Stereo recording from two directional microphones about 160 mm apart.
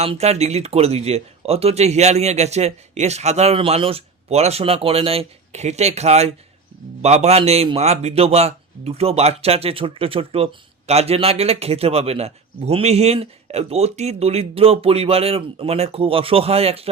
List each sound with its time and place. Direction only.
0.0 s a man's voice: 40° right (ahead or behind)